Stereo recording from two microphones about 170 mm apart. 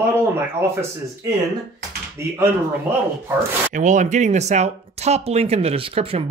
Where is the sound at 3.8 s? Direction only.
45° right (ahead or behind).